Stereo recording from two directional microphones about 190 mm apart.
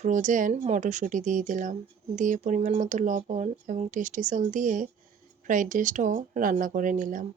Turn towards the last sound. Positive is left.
turn(degrees=-45)  # may be behind; listen again after turning